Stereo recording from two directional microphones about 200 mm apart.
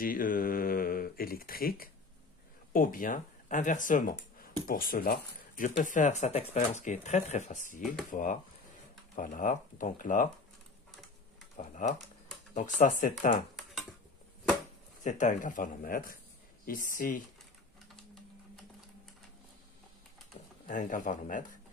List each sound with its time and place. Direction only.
0.0 s speech: 45° left (ahead or behind)
11.5 s typing: 35° left (ahead or behind)
12.5 s speech: 40° left (ahead or behind)
15.0 s speech: 40° left (ahead or behind)
20.6 s speech: 40° left (ahead or behind)